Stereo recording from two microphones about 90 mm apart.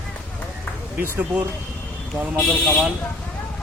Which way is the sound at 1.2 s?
15° right (ahead or behind).